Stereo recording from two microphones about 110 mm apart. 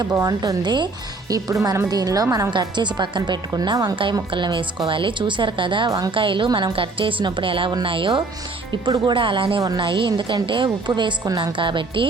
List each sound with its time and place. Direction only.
0.1 s a woman's voice: 30° right (ahead or behind)
2.5 s a woman's voice: 45° right (ahead or behind)
9.6 s a woman's voice: 35° right (ahead or behind)
9.8 s a woman's voice: 50° right (ahead or behind)